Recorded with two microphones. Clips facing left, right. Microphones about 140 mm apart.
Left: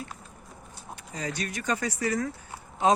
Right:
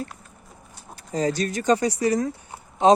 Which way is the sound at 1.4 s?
30° right (ahead or behind).